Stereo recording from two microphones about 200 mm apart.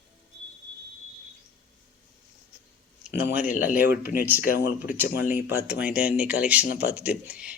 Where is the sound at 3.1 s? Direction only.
55° left (ahead or behind).